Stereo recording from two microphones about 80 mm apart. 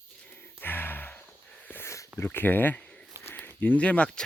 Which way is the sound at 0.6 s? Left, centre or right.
Left.